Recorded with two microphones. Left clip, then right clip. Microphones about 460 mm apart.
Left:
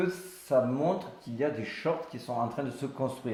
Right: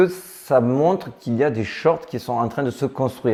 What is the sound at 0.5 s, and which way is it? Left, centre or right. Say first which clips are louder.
Speech: right 10 dB; right.